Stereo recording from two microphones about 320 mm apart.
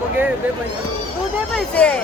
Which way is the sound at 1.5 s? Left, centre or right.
Centre.